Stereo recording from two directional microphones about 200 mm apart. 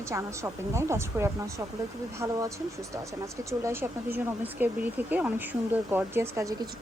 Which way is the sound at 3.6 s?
10° right (ahead or behind).